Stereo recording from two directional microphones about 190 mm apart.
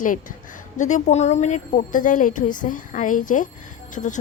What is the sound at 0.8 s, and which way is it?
A woman's voice, 40° left (ahead or behind).